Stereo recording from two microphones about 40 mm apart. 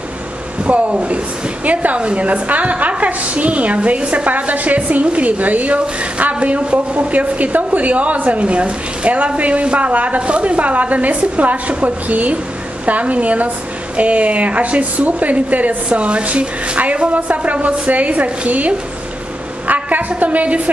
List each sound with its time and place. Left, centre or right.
0.7 s a woman's voice: right
19.7 s a sound: right
20.1 s a woman's voice: right